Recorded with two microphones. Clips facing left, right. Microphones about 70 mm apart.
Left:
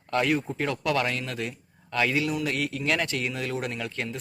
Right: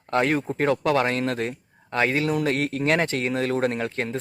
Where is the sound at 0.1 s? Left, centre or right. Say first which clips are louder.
Right 3 dB; right.